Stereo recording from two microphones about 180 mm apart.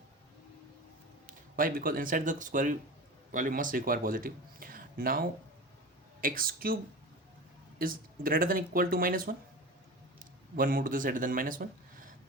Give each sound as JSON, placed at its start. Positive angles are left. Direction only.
{"t": 1.3, "sound": "speech", "side_deg": -50}
{"t": 7.8, "sound": "speech", "side_deg": -50}